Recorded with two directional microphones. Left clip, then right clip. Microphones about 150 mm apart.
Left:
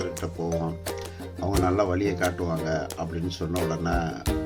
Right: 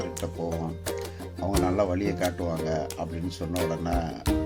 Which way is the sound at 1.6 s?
45° right (ahead or behind).